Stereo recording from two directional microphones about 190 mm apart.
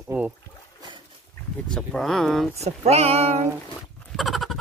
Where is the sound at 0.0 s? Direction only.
10° right (ahead or behind).